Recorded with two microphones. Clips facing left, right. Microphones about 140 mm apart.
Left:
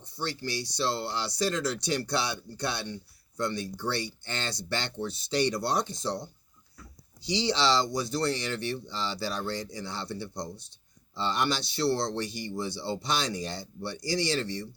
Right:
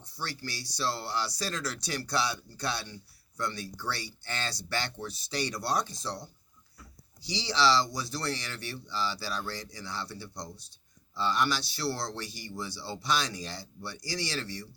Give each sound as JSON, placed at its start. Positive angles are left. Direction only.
{"t": 0.0, "sound": "speech", "side_deg": 20}